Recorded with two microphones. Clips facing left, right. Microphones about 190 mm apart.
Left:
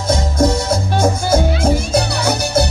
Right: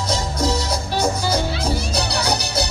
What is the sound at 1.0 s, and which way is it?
Music, 50° left (ahead or behind).